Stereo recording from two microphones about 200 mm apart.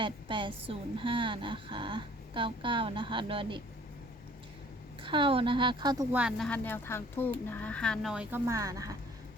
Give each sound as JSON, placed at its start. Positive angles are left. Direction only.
{"t": 0.0, "sound": "a woman's voice", "side_deg": -25}
{"t": 5.0, "sound": "a woman's voice", "side_deg": -25}
{"t": 6.1, "sound": "speech", "side_deg": 0}